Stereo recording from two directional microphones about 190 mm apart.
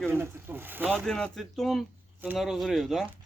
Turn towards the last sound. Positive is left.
turn(degrees=0)  # may be behind; listen again after turning